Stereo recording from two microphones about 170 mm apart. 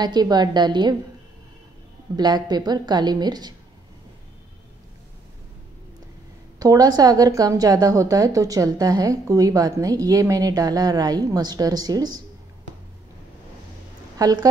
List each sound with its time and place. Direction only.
0.0 s a woman's voice: 25° right (ahead or behind)
2.1 s a woman's voice: 25° right (ahead or behind)
6.6 s a woman's voice: 20° right (ahead or behind)
14.1 s a woman's voice: 20° right (ahead or behind)